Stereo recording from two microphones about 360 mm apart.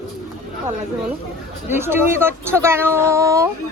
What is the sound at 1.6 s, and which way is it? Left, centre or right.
Speech, centre.